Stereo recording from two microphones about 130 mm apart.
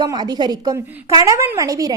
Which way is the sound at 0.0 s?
30° right (ahead or behind).